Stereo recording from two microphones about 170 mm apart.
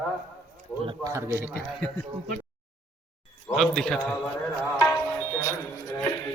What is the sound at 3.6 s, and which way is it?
Speech, 5° left (ahead or behind).